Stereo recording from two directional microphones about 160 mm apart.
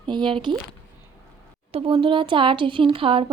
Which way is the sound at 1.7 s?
35° right (ahead or behind).